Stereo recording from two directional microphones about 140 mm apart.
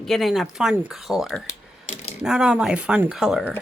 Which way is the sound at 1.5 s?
55° left (ahead or behind).